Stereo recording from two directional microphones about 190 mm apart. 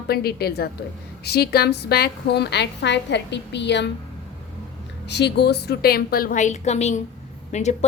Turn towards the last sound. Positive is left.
turn(degrees=35)  # may be behind; listen again after turning